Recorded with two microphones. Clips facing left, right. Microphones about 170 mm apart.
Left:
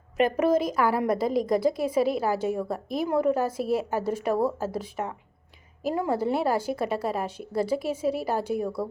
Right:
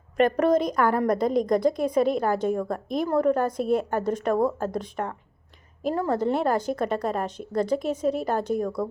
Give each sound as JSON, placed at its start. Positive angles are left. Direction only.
{"t": 0.2, "sound": "a woman's voice", "side_deg": 5}